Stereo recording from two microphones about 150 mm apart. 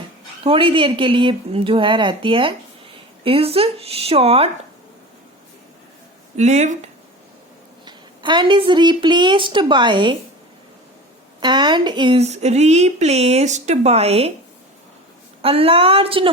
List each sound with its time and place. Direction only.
0.4 s a woman's voice: 35° right (ahead or behind)
6.3 s speech: 50° right (ahead or behind)
7.9 s a woman's voice: 30° right (ahead or behind)
11.3 s a woman's voice: 30° right (ahead or behind)
12.2 s speech: 45° right (ahead or behind)
15.4 s a woman's voice: 40° right (ahead or behind)